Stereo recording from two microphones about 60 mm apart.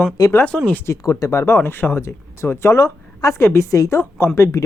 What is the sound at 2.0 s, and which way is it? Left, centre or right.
Speech, left.